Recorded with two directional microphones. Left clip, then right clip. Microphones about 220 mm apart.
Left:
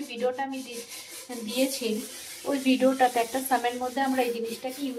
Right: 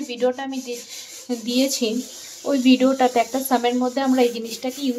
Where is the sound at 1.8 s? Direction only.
45° right (ahead or behind).